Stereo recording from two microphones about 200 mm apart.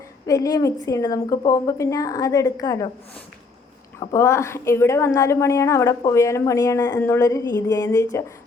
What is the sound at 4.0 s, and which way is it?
A woman's voice, 15° left (ahead or behind).